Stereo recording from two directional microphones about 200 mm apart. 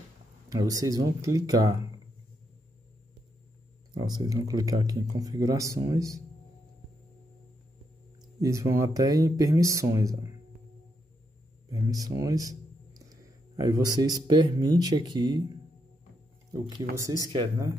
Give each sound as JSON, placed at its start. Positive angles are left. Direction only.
{"t": 0.5, "sound": "speech", "side_deg": -20}
{"t": 3.9, "sound": "speech", "side_deg": -20}
{"t": 8.4, "sound": "speech", "side_deg": -15}
{"t": 11.7, "sound": "speech", "side_deg": -20}
{"t": 16.9, "sound": "speech", "side_deg": -15}